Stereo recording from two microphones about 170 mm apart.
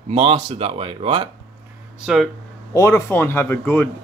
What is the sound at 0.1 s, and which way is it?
Speech, 35° right (ahead or behind).